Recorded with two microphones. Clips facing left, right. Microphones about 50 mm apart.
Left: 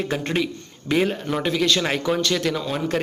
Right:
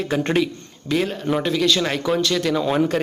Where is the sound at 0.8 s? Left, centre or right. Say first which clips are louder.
Even; centre.